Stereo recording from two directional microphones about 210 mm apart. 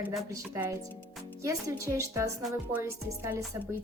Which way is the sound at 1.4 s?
15° right (ahead or behind).